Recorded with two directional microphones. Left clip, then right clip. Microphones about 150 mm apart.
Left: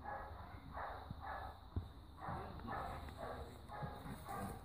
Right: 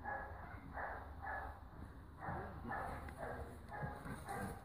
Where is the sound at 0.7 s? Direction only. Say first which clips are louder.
Right 1 dB; 60° right (ahead or behind).